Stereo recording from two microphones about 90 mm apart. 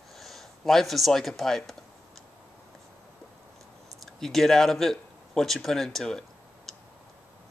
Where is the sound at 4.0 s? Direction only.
5° left (ahead or behind).